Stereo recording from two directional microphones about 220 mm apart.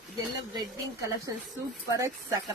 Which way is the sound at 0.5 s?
15° right (ahead or behind).